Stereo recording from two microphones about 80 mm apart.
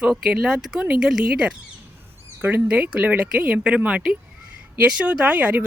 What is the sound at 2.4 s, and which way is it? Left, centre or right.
Speech, right.